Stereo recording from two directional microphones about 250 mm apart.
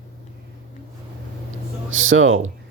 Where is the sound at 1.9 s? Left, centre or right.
Right.